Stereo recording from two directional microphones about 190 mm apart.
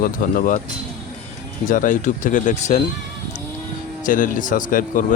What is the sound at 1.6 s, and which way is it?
Speech, 45° left (ahead or behind).